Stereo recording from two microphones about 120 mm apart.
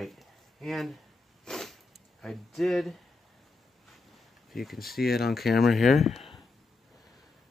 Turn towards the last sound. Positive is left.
turn(degrees=0)  # may be behind; listen again after turning